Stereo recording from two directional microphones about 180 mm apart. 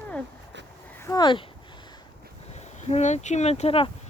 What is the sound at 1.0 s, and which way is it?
Speech, 25° left (ahead or behind).